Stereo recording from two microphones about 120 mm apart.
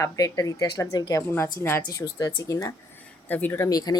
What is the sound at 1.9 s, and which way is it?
Speech, 30° left (ahead or behind).